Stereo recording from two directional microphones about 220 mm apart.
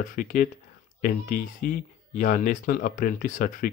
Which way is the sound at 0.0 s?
40° left (ahead or behind).